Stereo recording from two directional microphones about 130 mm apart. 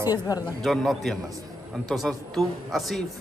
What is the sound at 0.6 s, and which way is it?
A man's voice, centre (ahead or behind).